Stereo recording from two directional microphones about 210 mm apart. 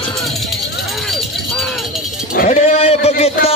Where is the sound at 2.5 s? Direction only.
30° left (ahead or behind).